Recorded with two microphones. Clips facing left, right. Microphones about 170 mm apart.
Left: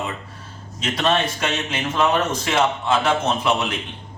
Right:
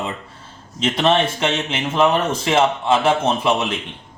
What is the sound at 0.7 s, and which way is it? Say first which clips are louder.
A man's voice: right 4 dB; 25° right (ahead or behind).